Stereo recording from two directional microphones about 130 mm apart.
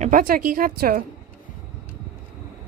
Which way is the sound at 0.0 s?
90° right.